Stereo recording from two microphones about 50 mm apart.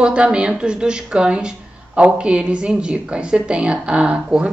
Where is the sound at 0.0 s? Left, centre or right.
Right.